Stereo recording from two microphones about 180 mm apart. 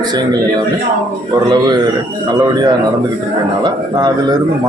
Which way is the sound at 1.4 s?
25° right (ahead or behind).